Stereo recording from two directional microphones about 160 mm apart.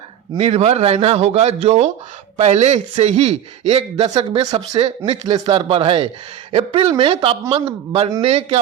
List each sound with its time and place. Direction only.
0.3 s a man's voice: 40° right (ahead or behind)